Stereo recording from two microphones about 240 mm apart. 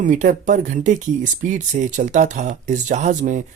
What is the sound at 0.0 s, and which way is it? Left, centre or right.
Speech, right.